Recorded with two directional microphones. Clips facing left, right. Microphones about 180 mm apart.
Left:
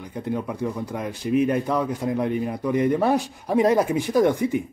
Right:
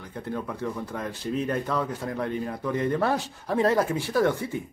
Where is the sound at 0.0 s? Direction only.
15° left (ahead or behind).